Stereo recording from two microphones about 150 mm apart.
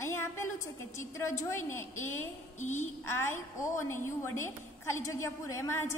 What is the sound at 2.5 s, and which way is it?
Speech, 55° left (ahead or behind).